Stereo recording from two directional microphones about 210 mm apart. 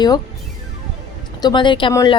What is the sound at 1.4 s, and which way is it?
Speech, 20° left (ahead or behind).